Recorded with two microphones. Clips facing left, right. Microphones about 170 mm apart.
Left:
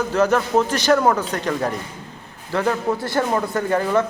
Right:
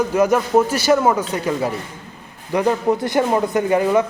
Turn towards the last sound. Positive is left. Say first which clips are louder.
# right 3 dB
turn(degrees=-15)  # may be behind; listen again after turning